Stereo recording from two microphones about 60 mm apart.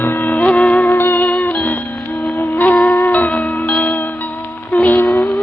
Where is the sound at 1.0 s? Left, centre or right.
Left.